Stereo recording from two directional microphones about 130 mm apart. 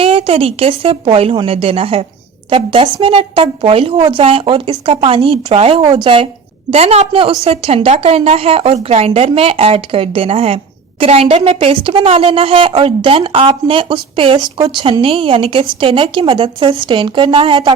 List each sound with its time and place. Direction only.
0.0 s a woman's voice: 45° right (ahead or behind)
6.7 s a woman's voice: 50° right (ahead or behind)